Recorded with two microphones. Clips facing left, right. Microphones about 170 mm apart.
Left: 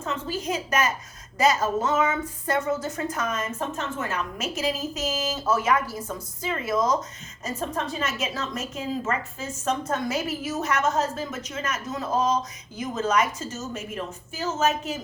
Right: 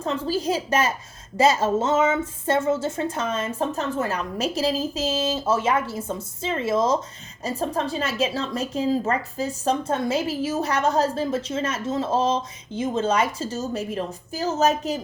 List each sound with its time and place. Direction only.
0.0 s a woman's voice: 35° right (ahead or behind)